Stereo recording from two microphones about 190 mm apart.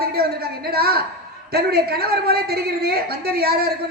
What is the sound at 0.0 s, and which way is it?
A woman's voice, 55° right (ahead or behind).